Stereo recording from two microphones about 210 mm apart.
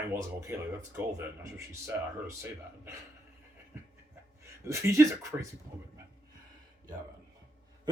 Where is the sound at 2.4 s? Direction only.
10° right (ahead or behind).